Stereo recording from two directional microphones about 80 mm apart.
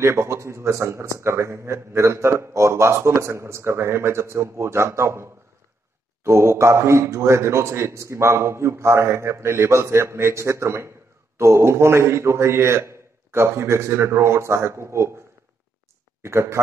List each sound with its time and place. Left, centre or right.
0.0 s a man's voice: right
16.2 s speech: right